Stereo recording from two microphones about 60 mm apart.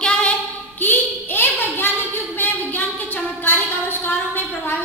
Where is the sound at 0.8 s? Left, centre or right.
Left.